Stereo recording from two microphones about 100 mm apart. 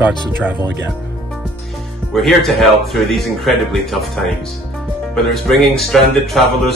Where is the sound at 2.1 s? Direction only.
Centre (ahead or behind).